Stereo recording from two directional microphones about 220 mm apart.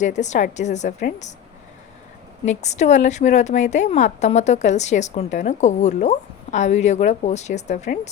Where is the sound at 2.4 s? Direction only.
30° left (ahead or behind).